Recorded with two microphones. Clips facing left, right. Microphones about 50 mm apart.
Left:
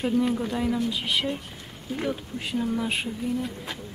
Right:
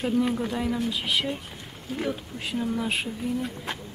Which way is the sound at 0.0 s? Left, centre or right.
Centre.